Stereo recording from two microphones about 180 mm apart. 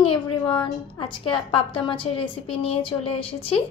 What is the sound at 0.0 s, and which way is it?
A woman's voice, 25° left (ahead or behind).